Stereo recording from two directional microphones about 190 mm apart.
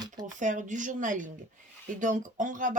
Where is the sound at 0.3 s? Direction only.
40° right (ahead or behind).